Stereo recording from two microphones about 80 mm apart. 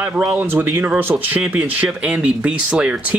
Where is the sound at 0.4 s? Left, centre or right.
Right.